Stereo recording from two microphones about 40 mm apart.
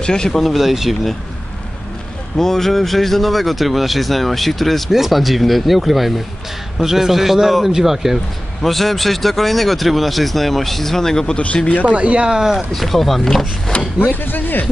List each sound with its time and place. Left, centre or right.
0.0 s speech: left
0.3 s speech: centre
2.3 s a man's voice: centre
8.6 s speech: centre
11.3 s speech: left
11.8 s speech: right
12.5 s speech: centre
13.7 s speech: centre
14.2 s speech: left